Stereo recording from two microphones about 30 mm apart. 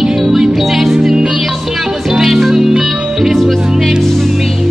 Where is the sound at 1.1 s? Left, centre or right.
Right.